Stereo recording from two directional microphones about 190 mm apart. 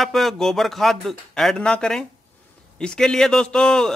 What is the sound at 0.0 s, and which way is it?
A man's voice, centre (ahead or behind).